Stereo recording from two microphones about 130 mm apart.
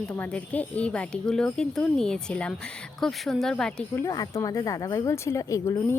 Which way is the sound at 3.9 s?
25° left (ahead or behind).